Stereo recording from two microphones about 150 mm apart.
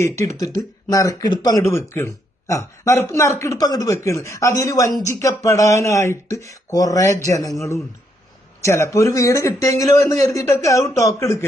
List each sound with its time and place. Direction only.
0.0 s a man's voice: 20° left (ahead or behind)
8.6 s a man's voice: 20° left (ahead or behind)